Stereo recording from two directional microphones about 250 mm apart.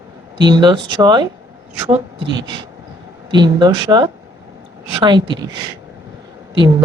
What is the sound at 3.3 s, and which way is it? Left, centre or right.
Speech, centre.